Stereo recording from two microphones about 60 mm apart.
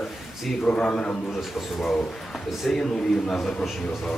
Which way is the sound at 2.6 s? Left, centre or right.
Centre.